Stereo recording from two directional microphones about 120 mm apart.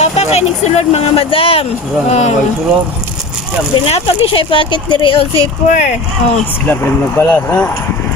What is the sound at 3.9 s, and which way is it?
Speech, 50° left (ahead or behind).